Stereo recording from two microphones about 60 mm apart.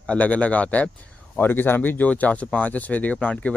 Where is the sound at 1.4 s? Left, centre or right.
Left.